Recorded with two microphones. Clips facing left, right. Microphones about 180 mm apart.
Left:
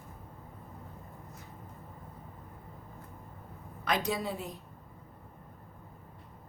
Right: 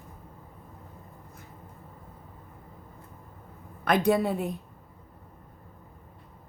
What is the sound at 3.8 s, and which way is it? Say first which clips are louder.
Speech: right 8 dB; 55° right (ahead or behind).